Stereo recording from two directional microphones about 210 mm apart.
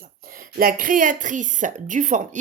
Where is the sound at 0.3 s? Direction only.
40° right (ahead or behind).